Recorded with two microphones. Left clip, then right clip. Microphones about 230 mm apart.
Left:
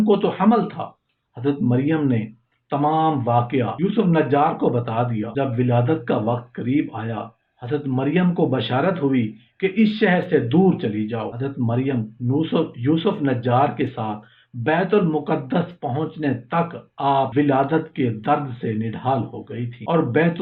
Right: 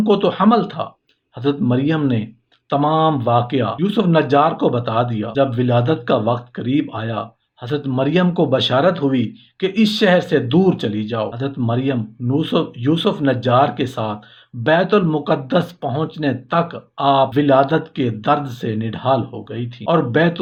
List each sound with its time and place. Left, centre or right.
0.0 s speech: right